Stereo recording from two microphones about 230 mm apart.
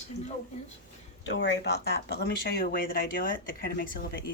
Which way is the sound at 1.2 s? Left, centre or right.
Left.